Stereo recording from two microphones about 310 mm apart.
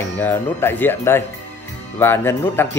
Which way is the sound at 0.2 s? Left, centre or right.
Centre.